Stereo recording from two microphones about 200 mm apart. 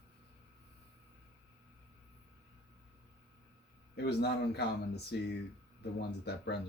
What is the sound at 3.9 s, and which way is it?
Speech, 55° left (ahead or behind).